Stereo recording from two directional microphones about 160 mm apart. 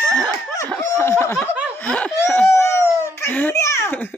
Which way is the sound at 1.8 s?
5° left (ahead or behind).